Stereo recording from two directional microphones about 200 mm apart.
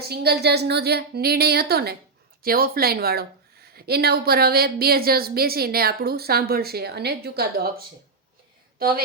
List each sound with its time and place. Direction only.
0.1 s a woman's voice: 55° right (ahead or behind)